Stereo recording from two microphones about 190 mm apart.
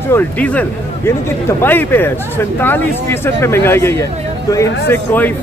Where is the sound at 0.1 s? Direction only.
10° left (ahead or behind).